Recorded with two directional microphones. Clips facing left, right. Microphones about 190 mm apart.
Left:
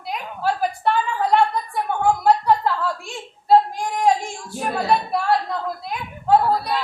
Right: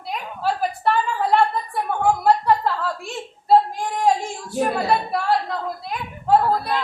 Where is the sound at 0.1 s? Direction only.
Centre (ahead or behind).